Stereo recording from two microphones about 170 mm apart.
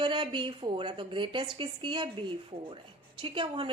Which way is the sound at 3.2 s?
30° right (ahead or behind).